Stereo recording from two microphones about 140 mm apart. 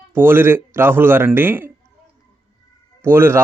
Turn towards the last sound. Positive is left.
turn(degrees=-20)  # may be behind; listen again after turning